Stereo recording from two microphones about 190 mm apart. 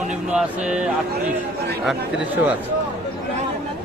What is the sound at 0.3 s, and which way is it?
A man's voice, 5° right (ahead or behind).